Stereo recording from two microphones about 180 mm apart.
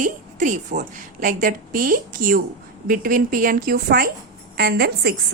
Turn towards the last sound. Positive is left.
turn(degrees=-60)  # may be behind; listen again after turning